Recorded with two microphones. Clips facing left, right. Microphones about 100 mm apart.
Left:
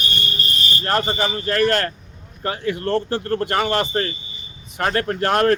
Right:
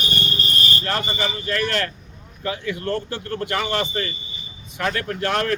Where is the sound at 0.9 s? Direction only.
40° left (ahead or behind).